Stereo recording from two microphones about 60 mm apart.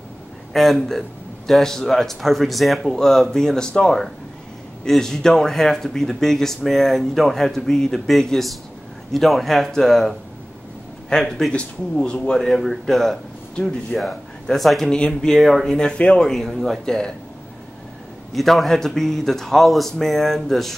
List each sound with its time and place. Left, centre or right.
0.5 s speech: centre
12.4 s speech: centre
15.3 s speech: centre
18.3 s speech: centre